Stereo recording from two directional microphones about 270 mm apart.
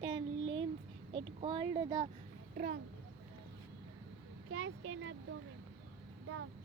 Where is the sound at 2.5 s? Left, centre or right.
Right.